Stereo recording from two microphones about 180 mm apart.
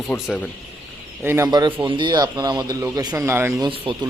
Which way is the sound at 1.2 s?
20° right (ahead or behind).